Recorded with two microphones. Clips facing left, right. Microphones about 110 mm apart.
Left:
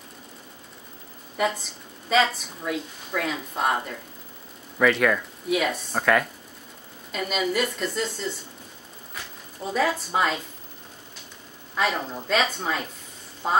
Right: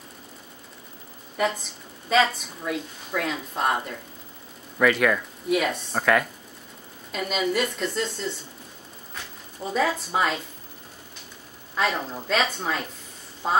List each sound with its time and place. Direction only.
1.3 s a woman's voice: centre (ahead or behind)
11.7 s a woman's voice: centre (ahead or behind)